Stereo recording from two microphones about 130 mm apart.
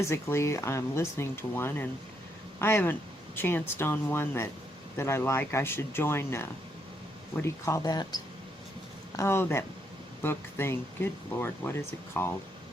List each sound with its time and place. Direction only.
0.0 s speech: 20° left (ahead or behind)
9.1 s speech: 20° left (ahead or behind)